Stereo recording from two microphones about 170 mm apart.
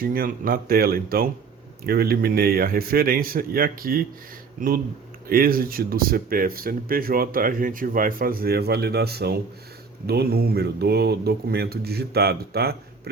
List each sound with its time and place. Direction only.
0.0 s speech: 60° right (ahead or behind)